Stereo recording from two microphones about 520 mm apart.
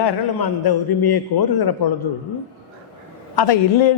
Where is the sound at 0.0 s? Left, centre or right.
Left.